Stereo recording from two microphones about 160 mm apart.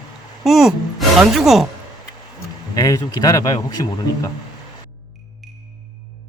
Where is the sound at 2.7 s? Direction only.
25° left (ahead or behind).